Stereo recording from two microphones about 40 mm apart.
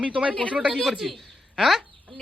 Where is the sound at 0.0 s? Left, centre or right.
Right.